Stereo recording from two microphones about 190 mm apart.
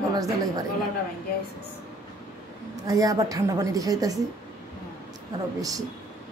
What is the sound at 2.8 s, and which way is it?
A woman's voice, 20° right (ahead or behind).